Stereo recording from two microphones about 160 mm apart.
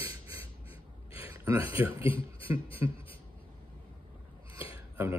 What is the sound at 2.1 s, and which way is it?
Speech, 35° left (ahead or behind).